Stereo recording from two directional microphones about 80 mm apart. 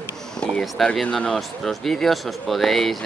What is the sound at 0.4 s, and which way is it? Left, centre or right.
Speech, centre.